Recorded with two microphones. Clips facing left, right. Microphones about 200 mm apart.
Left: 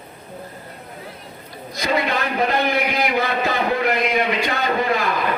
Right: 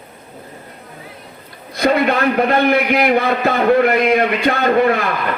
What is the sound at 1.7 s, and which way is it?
A man's voice, 55° right (ahead or behind).